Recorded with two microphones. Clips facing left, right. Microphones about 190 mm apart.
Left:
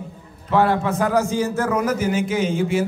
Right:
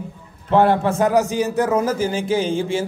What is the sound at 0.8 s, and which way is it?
A man's voice, 25° right (ahead or behind).